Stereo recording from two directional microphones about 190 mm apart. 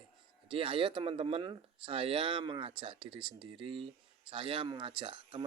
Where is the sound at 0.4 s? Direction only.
30° right (ahead or behind).